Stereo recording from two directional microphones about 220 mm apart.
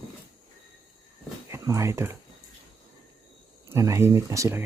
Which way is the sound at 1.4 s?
15° right (ahead or behind).